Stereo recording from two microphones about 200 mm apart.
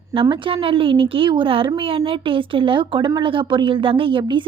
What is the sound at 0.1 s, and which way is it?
A woman's voice, 25° right (ahead or behind).